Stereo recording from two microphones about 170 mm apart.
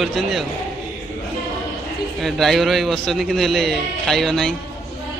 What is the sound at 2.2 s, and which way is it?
A man's voice, centre (ahead or behind).